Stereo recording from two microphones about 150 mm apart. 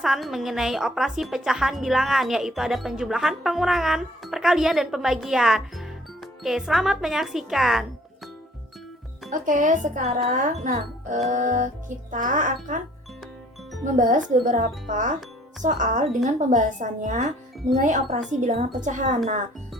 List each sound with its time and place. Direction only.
0.0 s a woman's voice: centre (ahead or behind)
9.3 s speech: 60° right (ahead or behind)
13.8 s speech: 60° right (ahead or behind)